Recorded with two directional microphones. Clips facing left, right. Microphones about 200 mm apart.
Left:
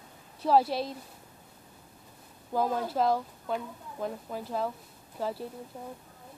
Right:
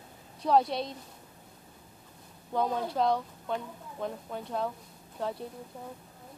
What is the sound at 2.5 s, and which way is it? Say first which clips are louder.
Speech: left 1 dB; 5° left (ahead or behind).